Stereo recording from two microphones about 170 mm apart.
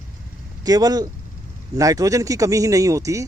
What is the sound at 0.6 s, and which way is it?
Speech, 20° right (ahead or behind).